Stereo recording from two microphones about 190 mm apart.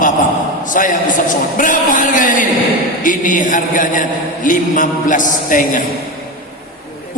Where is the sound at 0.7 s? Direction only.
45° left (ahead or behind).